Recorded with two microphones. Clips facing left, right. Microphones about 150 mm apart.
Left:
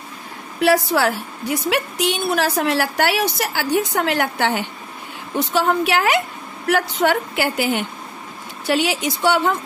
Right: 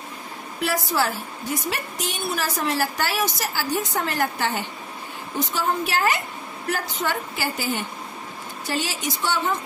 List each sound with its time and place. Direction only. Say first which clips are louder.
0.6 s a woman's voice: left 7 dB; 70° left (ahead or behind)